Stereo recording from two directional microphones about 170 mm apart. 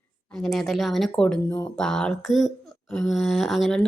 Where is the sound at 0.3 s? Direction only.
Centre (ahead or behind).